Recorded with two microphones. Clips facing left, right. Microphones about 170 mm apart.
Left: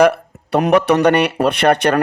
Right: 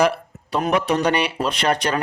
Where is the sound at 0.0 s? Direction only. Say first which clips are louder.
Left 6 dB; 65° left (ahead or behind).